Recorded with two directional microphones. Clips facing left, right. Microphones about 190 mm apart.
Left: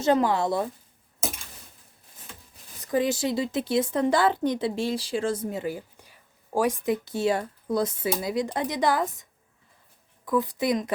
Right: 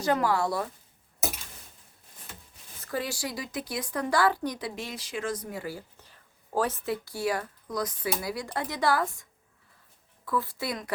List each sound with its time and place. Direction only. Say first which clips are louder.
0.0 s speech: left 4 dB; 25° left (ahead or behind)
2.8 s speech: left 8 dB; 20° left (ahead or behind)
10.2 s speech: left 7 dB; 15° left (ahead or behind)